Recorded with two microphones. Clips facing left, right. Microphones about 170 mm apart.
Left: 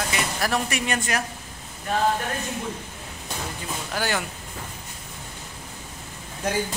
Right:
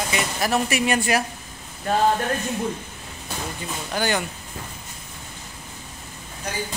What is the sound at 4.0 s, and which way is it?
Speech, centre (ahead or behind).